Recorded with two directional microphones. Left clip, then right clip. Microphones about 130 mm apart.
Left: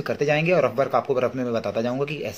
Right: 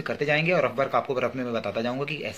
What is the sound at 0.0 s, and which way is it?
Speech, 35° left (ahead or behind).